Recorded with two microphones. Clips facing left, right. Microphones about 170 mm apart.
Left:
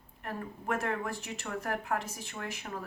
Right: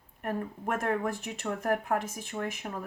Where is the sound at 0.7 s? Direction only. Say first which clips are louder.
Right 6 dB; 50° right (ahead or behind).